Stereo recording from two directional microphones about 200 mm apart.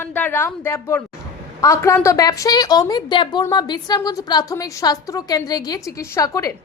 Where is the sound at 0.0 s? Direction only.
10° left (ahead or behind).